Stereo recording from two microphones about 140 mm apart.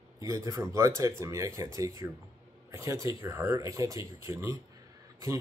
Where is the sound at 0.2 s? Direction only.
25° right (ahead or behind).